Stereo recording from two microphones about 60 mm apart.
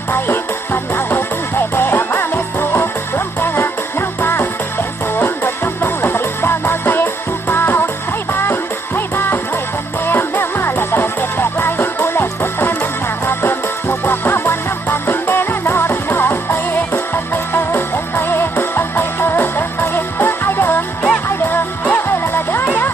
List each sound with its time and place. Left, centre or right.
0.1 s music: left